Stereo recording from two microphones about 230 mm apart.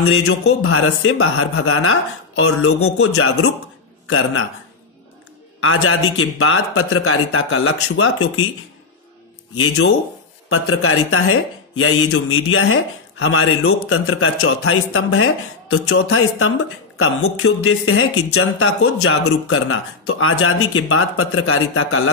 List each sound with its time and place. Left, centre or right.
0.0 s a man's voice: left
5.6 s a man's voice: left
9.6 s a man's voice: left